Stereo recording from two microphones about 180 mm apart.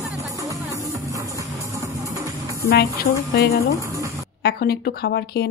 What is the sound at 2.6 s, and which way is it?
A woman's voice, 60° left (ahead or behind).